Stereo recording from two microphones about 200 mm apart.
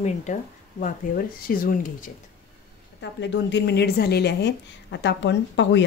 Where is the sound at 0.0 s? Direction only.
40° left (ahead or behind).